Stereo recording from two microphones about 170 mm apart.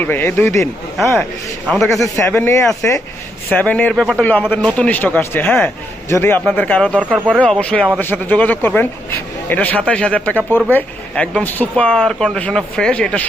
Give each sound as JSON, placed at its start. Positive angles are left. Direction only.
{"t": 0.0, "sound": "speech", "side_deg": 10}
{"t": 1.9, "sound": "speech", "side_deg": 20}